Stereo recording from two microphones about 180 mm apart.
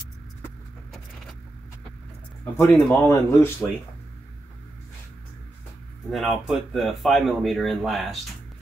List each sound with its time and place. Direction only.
2.5 s speech: 15° left (ahead or behind)
6.0 s speech: centre (ahead or behind)